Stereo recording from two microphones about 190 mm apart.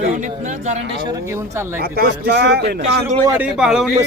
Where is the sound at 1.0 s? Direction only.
15° right (ahead or behind).